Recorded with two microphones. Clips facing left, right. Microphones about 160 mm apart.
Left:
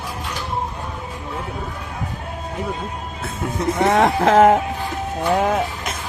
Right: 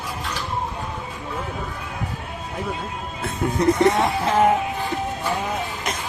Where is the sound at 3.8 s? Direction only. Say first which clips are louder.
Left 2 dB; 85° left.